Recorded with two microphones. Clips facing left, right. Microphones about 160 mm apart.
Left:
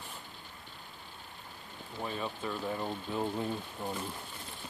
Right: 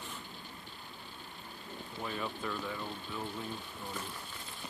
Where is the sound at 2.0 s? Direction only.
20° left (ahead or behind).